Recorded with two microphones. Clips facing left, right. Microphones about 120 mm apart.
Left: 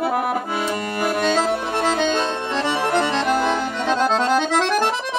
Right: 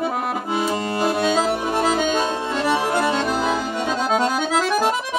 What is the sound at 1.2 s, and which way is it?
Accordion, 10° right (ahead or behind).